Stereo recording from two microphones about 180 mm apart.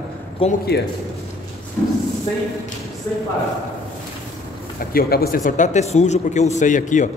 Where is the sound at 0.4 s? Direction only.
30° left (ahead or behind).